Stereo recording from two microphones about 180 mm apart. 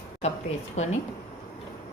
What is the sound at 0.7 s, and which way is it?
Speech, 40° left (ahead or behind).